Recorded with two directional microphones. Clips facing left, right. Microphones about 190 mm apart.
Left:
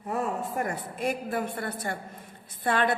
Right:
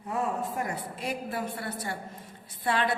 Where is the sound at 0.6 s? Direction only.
50° left (ahead or behind).